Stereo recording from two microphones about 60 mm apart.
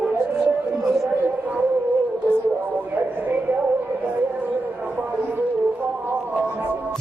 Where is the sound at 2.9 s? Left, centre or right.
Right.